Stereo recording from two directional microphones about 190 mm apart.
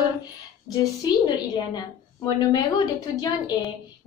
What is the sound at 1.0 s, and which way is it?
A woman's voice, 20° left (ahead or behind).